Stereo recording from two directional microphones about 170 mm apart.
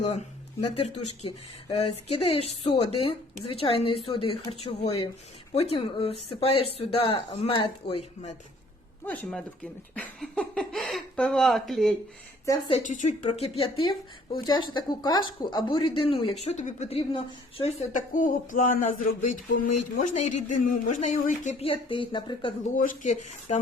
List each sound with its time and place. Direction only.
0.7 s speech: 35° left (ahead or behind)
9.0 s speech: 10° left (ahead or behind)
12.9 s speech: 45° left (ahead or behind)
18.1 s a sound: 50° left (ahead or behind)
21.7 s speech: 30° left (ahead or behind)
22.6 s a sound: 50° left (ahead or behind)